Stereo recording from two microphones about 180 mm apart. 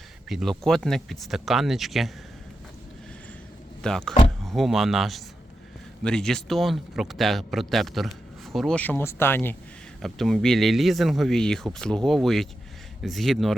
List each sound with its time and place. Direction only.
0.3 s speech: centre (ahead or behind)
3.8 s speech: 5° left (ahead or behind)